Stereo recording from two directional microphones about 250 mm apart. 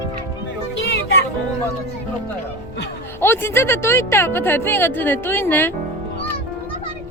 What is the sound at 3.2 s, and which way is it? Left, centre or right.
Speech, centre.